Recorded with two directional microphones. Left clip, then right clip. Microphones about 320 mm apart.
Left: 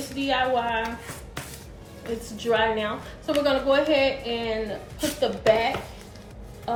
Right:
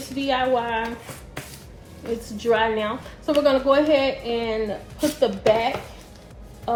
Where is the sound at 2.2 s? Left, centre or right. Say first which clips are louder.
Right 2 dB; centre.